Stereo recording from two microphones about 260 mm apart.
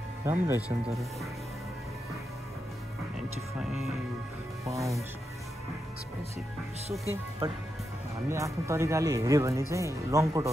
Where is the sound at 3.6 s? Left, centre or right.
Centre.